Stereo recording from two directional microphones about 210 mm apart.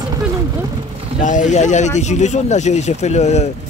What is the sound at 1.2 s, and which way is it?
Speech, 35° left (ahead or behind).